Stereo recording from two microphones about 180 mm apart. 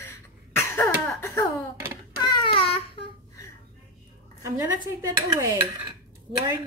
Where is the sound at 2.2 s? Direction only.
25° left (ahead or behind).